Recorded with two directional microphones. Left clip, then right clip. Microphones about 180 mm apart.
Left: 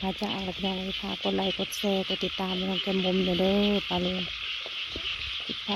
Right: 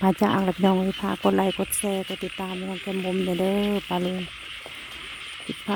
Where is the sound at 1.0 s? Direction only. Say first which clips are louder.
Right 6 dB; 40° right (ahead or behind).